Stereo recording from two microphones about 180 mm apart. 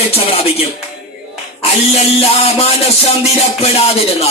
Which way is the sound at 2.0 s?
35° left (ahead or behind).